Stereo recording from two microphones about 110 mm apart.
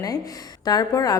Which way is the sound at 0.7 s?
35° left (ahead or behind).